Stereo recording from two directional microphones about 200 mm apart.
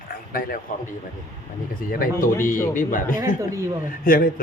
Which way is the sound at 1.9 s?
45° left (ahead or behind).